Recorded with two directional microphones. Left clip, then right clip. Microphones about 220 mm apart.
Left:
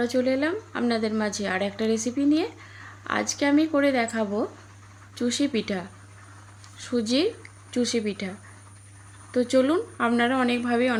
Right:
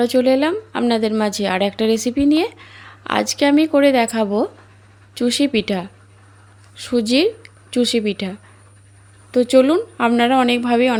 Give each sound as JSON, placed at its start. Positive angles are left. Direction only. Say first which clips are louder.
{"t": 0.0, "sound": "a woman's voice", "louder": "right 9 dB", "side_deg": -40}